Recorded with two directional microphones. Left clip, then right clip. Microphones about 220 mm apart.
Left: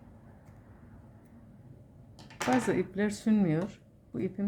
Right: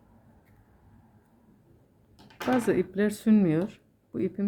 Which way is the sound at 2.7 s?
15° right (ahead or behind).